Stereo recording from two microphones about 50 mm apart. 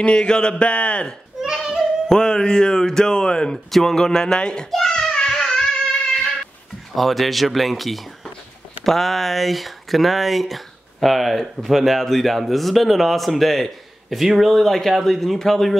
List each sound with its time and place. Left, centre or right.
0.0 s speech: centre
1.4 s a sound: centre
2.0 s speech: centre
4.6 s child singing: centre
7.0 s speech: centre